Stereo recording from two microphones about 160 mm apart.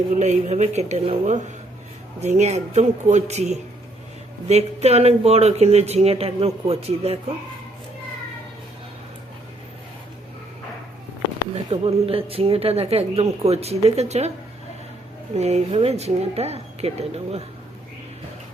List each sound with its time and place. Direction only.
0.2 s speech: 45° right (ahead or behind)
11.5 s speech: 35° right (ahead or behind)
15.4 s speech: 45° right (ahead or behind)